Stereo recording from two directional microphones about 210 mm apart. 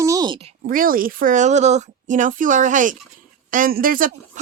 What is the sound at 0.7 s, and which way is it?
Speech, 40° right (ahead or behind).